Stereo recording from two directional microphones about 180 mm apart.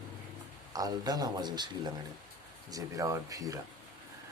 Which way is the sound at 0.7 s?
20° right (ahead or behind).